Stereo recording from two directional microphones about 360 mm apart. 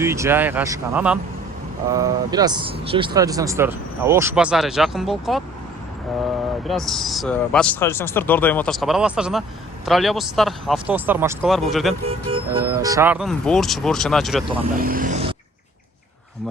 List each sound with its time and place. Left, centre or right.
0.0 s speech: centre
6.7 s speech: centre
12.0 s speech: centre
14.5 s speech: centre